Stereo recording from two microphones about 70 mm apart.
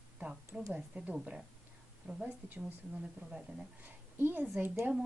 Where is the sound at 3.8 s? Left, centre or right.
Right.